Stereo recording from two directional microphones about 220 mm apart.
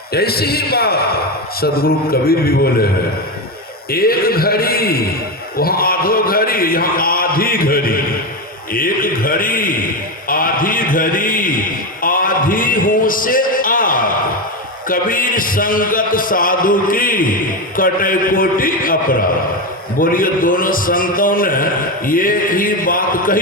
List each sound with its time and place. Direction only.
0.1 s a man's voice: 45° left (ahead or behind)
3.9 s a man's voice: 45° left (ahead or behind)